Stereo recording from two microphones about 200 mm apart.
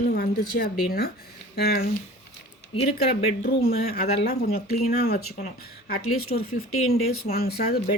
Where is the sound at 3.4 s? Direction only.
50° left (ahead or behind).